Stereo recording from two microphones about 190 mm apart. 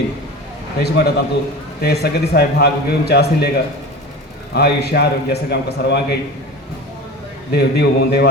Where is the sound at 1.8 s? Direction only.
60° left (ahead or behind).